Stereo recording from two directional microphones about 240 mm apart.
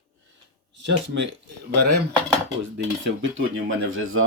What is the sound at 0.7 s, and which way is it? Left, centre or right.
Speech, right.